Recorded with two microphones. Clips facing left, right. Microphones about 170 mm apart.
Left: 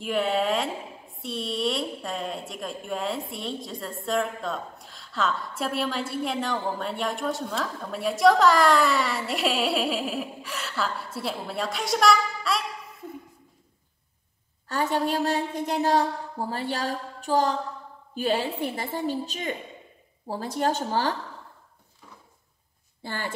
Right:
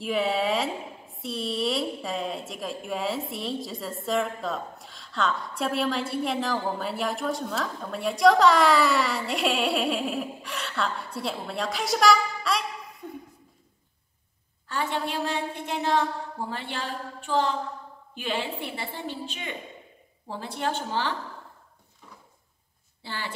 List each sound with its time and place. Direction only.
0.0 s speech: centre (ahead or behind)
14.7 s a woman's voice: 40° left (ahead or behind)
23.0 s a woman's voice: 50° left (ahead or behind)